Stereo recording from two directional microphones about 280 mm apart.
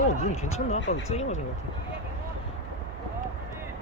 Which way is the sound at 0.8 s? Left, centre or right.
Left.